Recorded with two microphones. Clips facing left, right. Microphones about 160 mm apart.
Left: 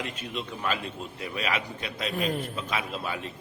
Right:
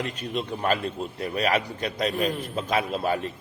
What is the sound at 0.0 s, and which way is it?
A man's voice, 40° right (ahead or behind).